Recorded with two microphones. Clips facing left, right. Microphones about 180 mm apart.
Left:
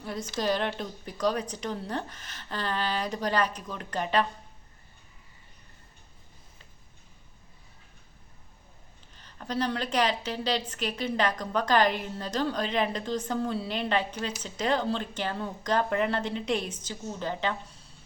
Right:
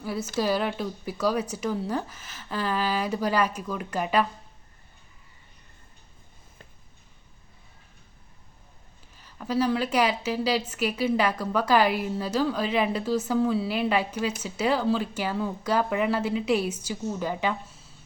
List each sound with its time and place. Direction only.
0.0 s a woman's voice: 5° right (ahead or behind)
9.1 s a woman's voice: 5° right (ahead or behind)